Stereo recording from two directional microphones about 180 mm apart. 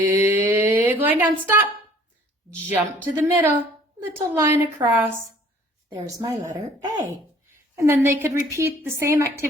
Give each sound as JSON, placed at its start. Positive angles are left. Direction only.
{"t": 0.0, "sound": "mantra", "side_deg": -15}
{"t": 1.0, "sound": "a woman's voice", "side_deg": -10}
{"t": 2.6, "sound": "a woman's voice", "side_deg": -10}